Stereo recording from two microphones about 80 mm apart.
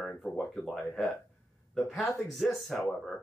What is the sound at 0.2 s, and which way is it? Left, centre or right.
A man's voice, centre.